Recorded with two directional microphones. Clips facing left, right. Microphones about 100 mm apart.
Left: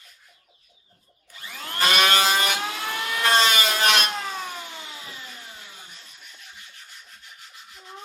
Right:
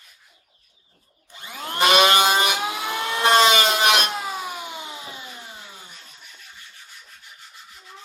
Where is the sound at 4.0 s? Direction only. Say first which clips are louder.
Right 2 dB; 10° right (ahead or behind).